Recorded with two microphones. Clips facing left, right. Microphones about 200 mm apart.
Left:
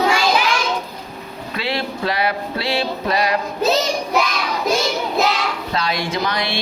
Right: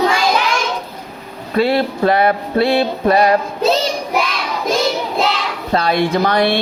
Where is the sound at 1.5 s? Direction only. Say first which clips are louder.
Right 9 dB; 50° right (ahead or behind).